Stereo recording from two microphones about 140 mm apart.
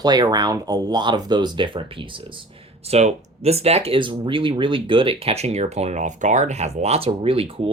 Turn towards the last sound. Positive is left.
turn(degrees=-45)  # may be behind; listen again after turning